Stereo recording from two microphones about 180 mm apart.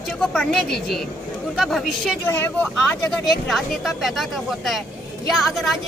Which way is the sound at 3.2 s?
Centre (ahead or behind).